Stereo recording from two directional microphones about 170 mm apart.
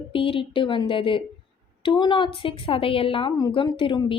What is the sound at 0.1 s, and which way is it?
A woman's voice, 30° left (ahead or behind).